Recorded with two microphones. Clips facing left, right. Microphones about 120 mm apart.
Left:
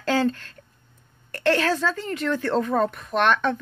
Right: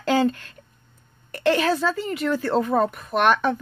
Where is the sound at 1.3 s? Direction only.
15° right (ahead or behind).